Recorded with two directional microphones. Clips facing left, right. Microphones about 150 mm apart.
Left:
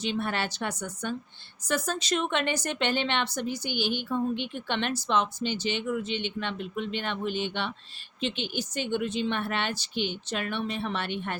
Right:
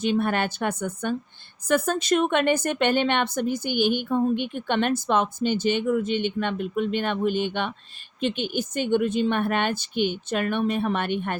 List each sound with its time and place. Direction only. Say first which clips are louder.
0.0 s a woman's voice: right 7 dB; 50° right (ahead or behind)